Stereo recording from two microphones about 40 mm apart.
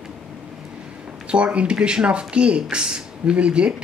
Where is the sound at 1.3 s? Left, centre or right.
Right.